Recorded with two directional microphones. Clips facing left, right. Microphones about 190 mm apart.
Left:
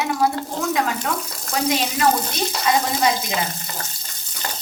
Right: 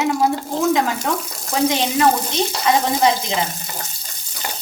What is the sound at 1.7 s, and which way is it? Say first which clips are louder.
Speech: right 3 dB; 20° right (ahead or behind).